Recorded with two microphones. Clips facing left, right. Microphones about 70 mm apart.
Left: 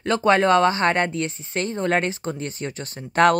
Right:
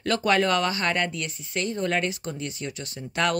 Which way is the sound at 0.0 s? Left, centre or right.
Left.